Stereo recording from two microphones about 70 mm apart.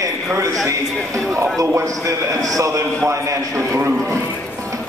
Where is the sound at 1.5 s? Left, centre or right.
Right.